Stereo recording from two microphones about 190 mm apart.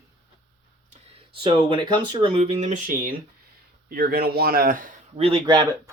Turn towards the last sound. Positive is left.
turn(degrees=-25)  # may be behind; listen again after turning